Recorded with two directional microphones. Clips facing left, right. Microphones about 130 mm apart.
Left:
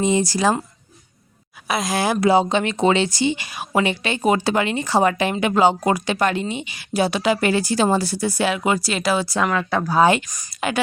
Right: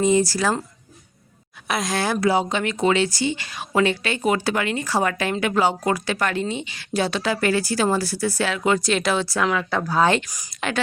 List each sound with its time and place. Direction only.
0.0 s speech: 20° left (ahead or behind)
1.6 s speech: 5° left (ahead or behind)
2.3 s speech: 25° left (ahead or behind); by 9.2 s 5° left (ahead or behind)
9.2 s speech: 15° left (ahead or behind)
10.2 s speech: 10° right (ahead or behind)
10.5 s speech: 5° left (ahead or behind)